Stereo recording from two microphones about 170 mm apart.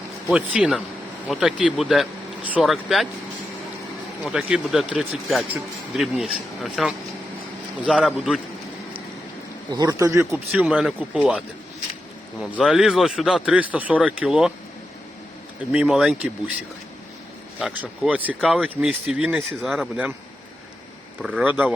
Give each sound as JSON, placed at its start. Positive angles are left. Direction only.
{"t": 0.3, "sound": "speech", "side_deg": -5}
{"t": 4.2, "sound": "speech", "side_deg": -5}
{"t": 9.7, "sound": "speech", "side_deg": -20}
{"t": 10.7, "sound": "speech", "side_deg": 0}
{"t": 15.7, "sound": "speech", "side_deg": -5}
{"t": 17.6, "sound": "speech", "side_deg": -5}
{"t": 21.2, "sound": "speech", "side_deg": -5}